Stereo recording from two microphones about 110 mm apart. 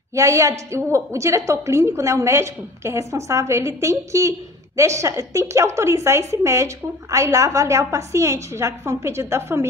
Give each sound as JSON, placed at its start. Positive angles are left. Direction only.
{"t": 0.1, "sound": "a woman's voice", "side_deg": -25}